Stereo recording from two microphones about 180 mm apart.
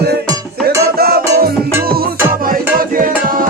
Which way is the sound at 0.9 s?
60° right (ahead or behind).